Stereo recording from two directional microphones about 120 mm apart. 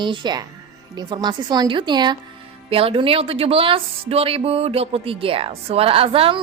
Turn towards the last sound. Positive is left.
turn(degrees=-50)  # may be behind; listen again after turning